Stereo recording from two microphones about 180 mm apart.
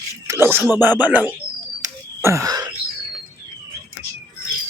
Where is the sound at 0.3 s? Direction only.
15° right (ahead or behind).